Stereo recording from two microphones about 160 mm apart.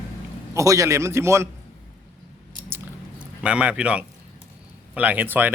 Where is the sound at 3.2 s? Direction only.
5° right (ahead or behind).